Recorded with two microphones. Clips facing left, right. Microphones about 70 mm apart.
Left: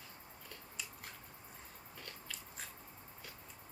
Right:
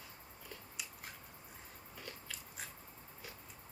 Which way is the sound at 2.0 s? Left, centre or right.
Centre.